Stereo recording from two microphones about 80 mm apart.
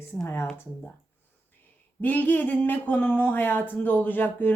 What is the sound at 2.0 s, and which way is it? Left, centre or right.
Speech, left.